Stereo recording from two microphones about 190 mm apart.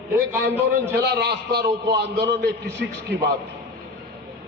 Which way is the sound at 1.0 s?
60° right (ahead or behind).